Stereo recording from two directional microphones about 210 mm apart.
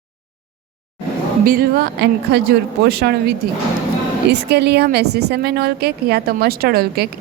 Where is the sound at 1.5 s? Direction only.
45° right (ahead or behind).